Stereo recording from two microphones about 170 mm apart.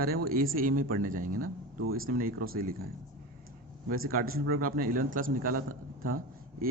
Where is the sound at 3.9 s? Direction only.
60° right (ahead or behind).